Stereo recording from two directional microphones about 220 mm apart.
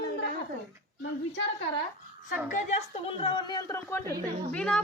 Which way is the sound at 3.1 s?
25° left (ahead or behind).